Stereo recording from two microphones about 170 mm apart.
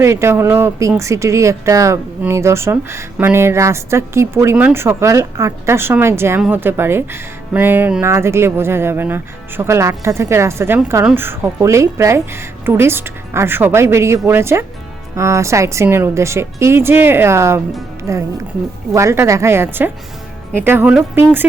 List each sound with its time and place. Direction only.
0.0 s speech: 15° right (ahead or behind)